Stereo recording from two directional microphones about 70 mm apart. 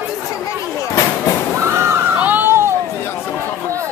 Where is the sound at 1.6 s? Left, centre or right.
Right.